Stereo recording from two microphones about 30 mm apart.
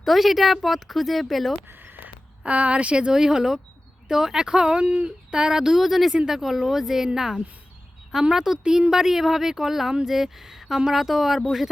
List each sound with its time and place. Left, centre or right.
0.0 s a woman's voice: centre
2.4 s speech: right
3.0 s speech: right
4.8 s speech: right
5.8 s speech: centre